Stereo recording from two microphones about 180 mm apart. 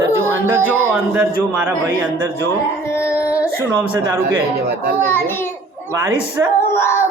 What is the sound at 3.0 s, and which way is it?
Singing, 15° left (ahead or behind).